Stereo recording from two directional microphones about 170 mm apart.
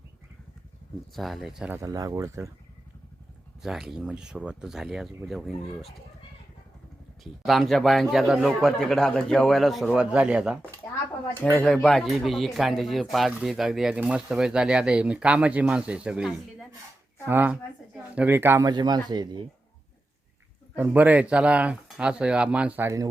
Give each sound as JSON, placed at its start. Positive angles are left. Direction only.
{"t": 1.1, "sound": "speech", "side_deg": 0}
{"t": 1.8, "sound": "speech", "side_deg": -20}
{"t": 3.6, "sound": "speech", "side_deg": 0}
{"t": 7.4, "sound": "speech", "side_deg": 0}
{"t": 11.4, "sound": "speech", "side_deg": 10}
{"t": 20.7, "sound": "speech", "side_deg": -10}